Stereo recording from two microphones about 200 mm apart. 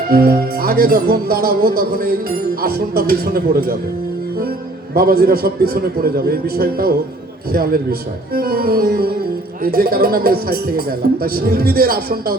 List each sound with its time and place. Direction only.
0.1 s speech: 50° right (ahead or behind)
4.9 s speech: 50° right (ahead or behind)